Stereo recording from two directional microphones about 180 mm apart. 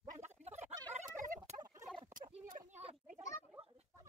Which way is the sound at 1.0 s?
45° right (ahead or behind).